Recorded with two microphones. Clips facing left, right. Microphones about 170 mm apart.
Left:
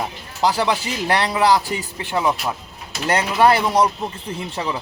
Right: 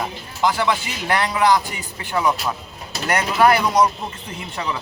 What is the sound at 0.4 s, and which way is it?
Speech, 35° left (ahead or behind).